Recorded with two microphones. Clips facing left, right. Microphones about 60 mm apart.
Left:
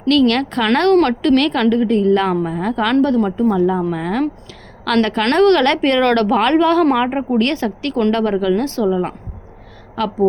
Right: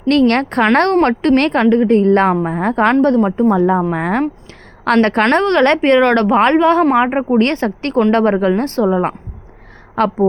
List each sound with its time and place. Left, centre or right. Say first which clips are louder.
0.1 s a woman's voice: right 2 dB; right
5.2 s a woman's voice: even; right